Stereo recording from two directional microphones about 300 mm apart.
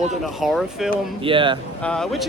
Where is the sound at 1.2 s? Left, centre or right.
Centre.